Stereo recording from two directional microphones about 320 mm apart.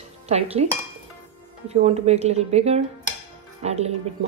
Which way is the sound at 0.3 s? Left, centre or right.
Centre.